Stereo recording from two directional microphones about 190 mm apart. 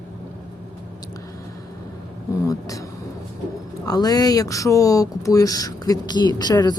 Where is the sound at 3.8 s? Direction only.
20° left (ahead or behind).